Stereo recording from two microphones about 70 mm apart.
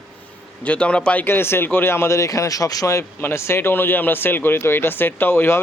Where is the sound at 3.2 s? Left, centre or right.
Left.